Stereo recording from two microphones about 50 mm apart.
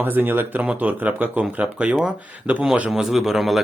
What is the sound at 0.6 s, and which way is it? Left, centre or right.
Speech, right.